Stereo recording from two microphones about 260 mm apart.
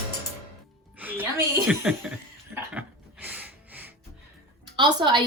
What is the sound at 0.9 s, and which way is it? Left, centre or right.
A woman's voice, centre.